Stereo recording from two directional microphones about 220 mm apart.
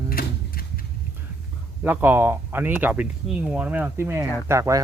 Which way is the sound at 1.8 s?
10° right (ahead or behind).